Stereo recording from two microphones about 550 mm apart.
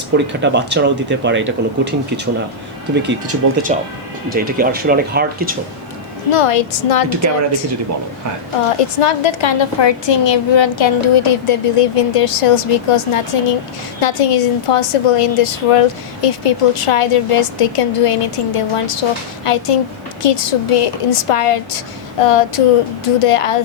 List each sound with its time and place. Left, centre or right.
0.1 s speech: centre
6.3 s a woman's voice: left
9.0 s a woman's voice: left